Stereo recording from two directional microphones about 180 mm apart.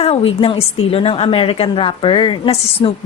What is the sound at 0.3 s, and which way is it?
Speech, 30° left (ahead or behind).